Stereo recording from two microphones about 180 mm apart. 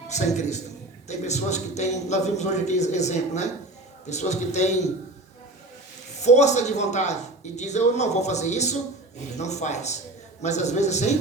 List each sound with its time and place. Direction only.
0.1 s speech: 40° left (ahead or behind)
6.2 s speech: 40° left (ahead or behind)